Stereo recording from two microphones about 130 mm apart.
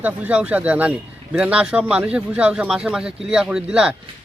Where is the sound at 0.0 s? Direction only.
10° right (ahead or behind).